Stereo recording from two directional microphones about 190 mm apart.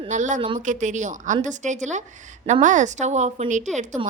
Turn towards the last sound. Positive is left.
turn(degrees=-40)  # may be behind; listen again after turning